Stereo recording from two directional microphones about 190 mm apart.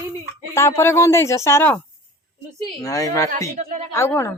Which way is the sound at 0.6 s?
15° left (ahead or behind).